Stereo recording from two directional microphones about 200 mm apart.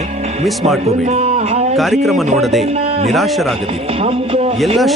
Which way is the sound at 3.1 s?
Centre (ahead or behind).